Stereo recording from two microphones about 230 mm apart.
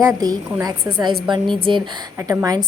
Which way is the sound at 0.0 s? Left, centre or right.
Centre.